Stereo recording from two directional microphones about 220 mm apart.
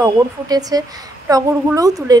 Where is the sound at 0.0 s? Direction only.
15° right (ahead or behind).